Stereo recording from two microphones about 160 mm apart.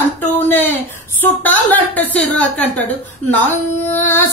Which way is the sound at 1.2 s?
10° left (ahead or behind).